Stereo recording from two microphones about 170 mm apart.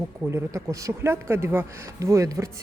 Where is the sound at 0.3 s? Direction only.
15° right (ahead or behind).